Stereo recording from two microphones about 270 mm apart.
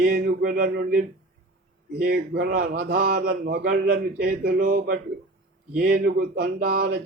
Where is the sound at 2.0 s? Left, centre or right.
Right.